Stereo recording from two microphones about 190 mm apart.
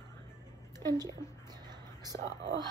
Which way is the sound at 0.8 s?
15° left (ahead or behind).